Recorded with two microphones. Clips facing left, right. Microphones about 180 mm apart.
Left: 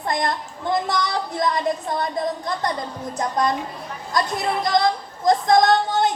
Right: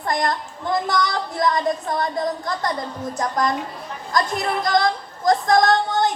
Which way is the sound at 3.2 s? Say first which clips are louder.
Left 1 dB; 25° left (ahead or behind).